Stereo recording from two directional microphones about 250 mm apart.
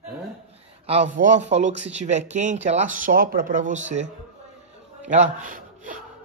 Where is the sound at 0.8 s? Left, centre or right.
Right.